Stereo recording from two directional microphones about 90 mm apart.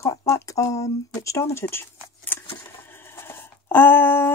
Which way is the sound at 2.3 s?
20° left (ahead or behind).